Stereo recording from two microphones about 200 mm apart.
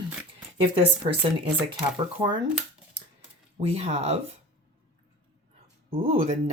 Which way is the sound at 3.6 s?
30° right (ahead or behind).